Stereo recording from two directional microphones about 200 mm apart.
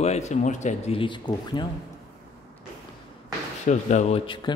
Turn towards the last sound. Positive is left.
turn(degrees=25)  # may be behind; listen again after turning